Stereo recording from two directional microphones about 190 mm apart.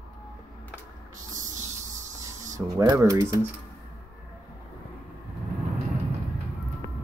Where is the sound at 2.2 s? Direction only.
15° right (ahead or behind).